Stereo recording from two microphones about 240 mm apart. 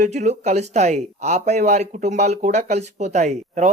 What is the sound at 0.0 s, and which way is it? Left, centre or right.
Speech, right.